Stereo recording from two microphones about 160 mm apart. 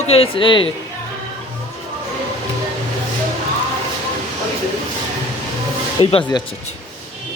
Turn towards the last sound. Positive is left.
turn(degrees=30)  # may be behind; listen again after turning